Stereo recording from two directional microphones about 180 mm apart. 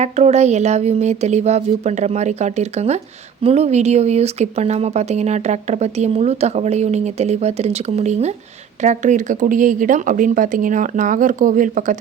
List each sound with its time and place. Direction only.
0.0 s speech: 40° right (ahead or behind)